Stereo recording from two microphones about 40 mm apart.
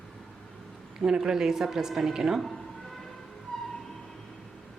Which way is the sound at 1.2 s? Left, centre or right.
Centre.